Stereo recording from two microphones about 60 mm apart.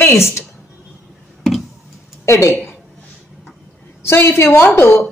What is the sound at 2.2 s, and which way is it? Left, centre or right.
Speech, left.